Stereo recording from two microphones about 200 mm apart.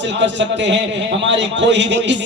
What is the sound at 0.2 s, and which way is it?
A man's voice, 60° right (ahead or behind).